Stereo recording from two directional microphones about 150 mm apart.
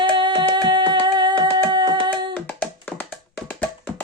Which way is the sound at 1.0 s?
30° right (ahead or behind).